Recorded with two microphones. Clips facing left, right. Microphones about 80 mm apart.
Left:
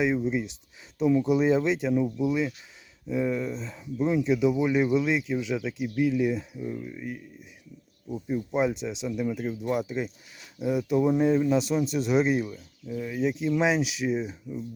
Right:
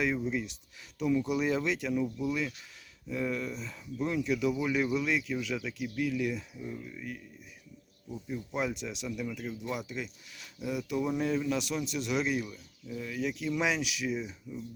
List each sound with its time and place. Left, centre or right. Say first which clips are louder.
0.0 s speech: left 5 dB; left
8.4 s speech: left 7 dB; left